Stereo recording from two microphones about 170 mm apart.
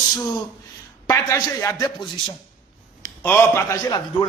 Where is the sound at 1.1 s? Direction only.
20° left (ahead or behind).